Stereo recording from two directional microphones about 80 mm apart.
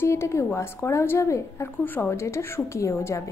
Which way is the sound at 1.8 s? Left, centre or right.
Left.